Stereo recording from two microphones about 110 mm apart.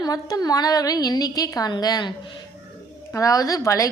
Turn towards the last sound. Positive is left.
turn(degrees=30)  # may be behind; listen again after turning